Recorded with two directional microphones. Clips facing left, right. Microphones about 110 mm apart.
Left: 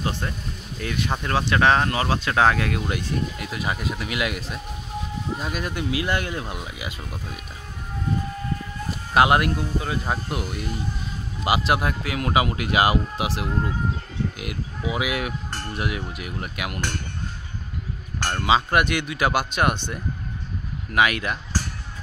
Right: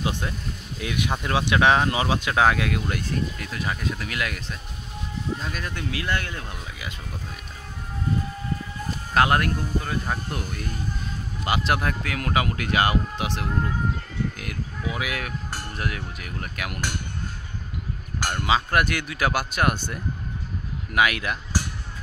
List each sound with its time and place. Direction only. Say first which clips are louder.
0.7 s speech: even; 10° right (ahead or behind)
3.3 s speech: left 2 dB; 15° left (ahead or behind)
9.1 s speech: left 3 dB; 10° left (ahead or behind)
18.4 s speech: left 2 dB; 5° left (ahead or behind)